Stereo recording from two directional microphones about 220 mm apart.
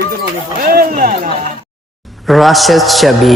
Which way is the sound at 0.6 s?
40° right (ahead or behind).